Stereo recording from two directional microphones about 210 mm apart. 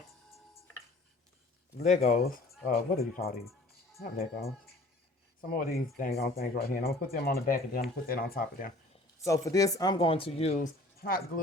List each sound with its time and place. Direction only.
1.8 s speech: 35° left (ahead or behind)
9.2 s speech: 15° left (ahead or behind)